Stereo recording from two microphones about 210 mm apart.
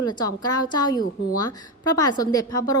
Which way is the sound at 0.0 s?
20° left (ahead or behind).